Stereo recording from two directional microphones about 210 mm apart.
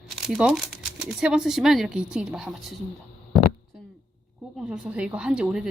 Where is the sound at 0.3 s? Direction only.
Centre (ahead or behind).